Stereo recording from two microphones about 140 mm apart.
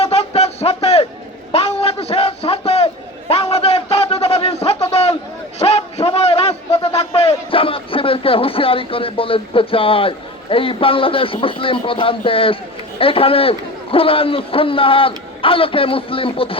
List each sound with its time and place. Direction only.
0.0 s music: 50° left (ahead or behind)
1.5 s a sound: 45° left (ahead or behind)
13.0 s a man's voice: 40° left (ahead or behind)